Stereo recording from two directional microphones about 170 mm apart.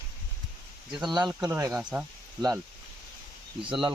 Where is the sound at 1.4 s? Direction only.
15° right (ahead or behind).